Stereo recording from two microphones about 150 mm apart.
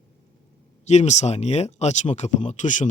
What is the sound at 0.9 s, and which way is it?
Speech, 50° left (ahead or behind).